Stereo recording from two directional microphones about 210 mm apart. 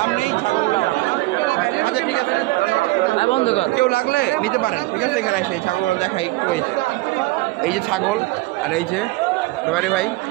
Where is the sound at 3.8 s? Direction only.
45° left (ahead or behind).